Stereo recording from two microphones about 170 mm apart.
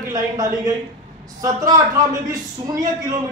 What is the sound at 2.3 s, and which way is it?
Speech, 20° right (ahead or behind).